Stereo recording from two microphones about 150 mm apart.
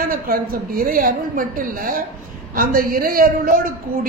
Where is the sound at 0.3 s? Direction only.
75° right (ahead or behind).